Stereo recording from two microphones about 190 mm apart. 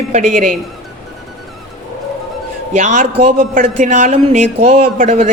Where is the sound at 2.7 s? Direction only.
40° right (ahead or behind).